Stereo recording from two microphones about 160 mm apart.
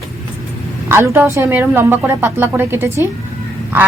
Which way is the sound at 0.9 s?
15° right (ahead or behind).